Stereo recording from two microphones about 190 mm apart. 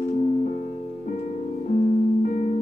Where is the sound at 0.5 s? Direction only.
45° left (ahead or behind).